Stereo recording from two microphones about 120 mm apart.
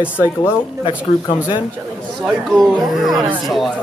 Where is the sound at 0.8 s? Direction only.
45° left (ahead or behind).